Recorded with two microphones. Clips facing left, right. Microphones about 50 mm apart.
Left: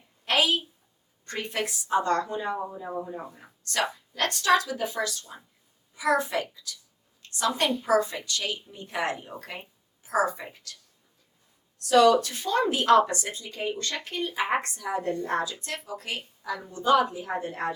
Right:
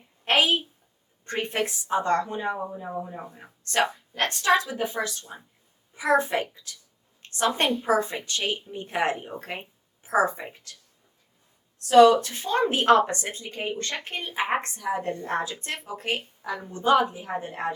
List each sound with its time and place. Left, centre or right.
0.3 s a woman's voice: right
11.9 s speech: right